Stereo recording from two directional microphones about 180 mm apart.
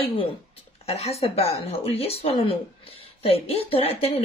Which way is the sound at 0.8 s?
35° left (ahead or behind).